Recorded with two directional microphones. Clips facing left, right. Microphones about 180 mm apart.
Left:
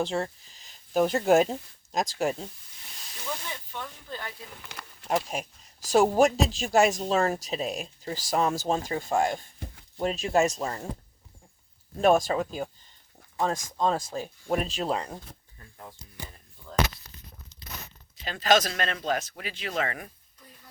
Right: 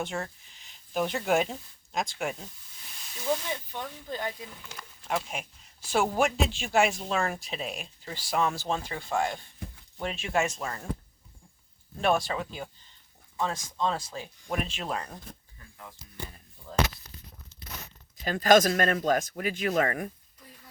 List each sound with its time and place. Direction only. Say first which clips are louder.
0.0 s speech: left 5 dB; 30° left (ahead or behind)
3.7 s speech: right 2 dB; 15° right (ahead or behind)
5.3 s speech: left 4 dB; 40° left (ahead or behind)
11.9 s speech: left 5 dB; 40° left (ahead or behind); by 15.2 s 25° left (ahead or behind)
17.5 s tearing: right 2 dB; 15° left (ahead or behind)
18.2 s speech: right 3 dB; 45° right (ahead or behind)